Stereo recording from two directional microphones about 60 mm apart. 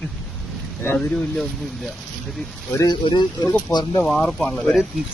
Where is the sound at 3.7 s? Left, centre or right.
Left.